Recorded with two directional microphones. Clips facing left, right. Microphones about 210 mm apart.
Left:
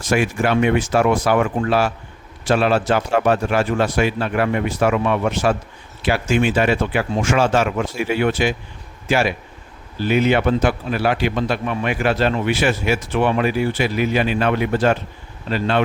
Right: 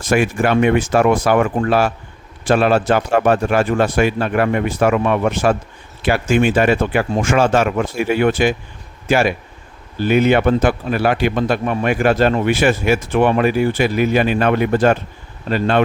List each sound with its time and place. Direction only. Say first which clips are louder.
0.1 s a man's voice: right 3 dB; 50° right (ahead or behind)